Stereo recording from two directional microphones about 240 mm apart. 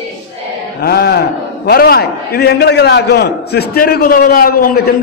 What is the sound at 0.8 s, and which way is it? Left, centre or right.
A man's voice, left.